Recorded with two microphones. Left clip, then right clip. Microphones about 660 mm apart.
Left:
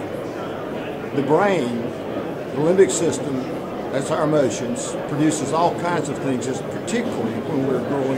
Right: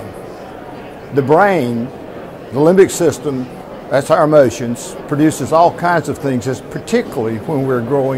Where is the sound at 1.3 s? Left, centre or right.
Right.